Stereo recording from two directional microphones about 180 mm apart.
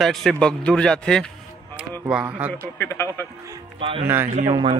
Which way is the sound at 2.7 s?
15° left (ahead or behind).